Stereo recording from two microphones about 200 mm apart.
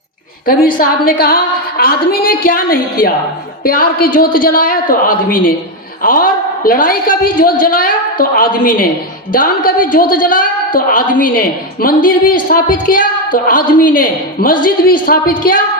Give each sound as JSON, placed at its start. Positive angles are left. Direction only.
{"t": 0.4, "sound": "a woman's voice", "side_deg": 45}